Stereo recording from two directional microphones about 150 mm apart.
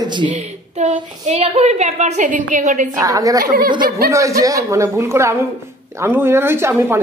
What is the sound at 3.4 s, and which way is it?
Speech, 70° right (ahead or behind).